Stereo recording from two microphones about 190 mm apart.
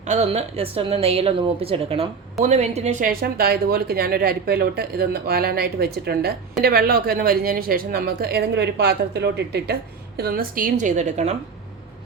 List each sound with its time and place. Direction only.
0.1 s a woman's voice: 35° right (ahead or behind)